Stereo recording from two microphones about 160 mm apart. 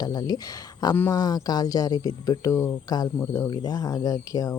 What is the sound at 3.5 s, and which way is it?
Speech, 25° left (ahead or behind).